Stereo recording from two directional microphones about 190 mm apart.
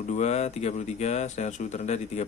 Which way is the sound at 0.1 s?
35° left (ahead or behind).